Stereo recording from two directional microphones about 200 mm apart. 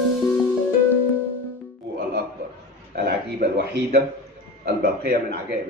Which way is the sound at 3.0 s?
45° right (ahead or behind).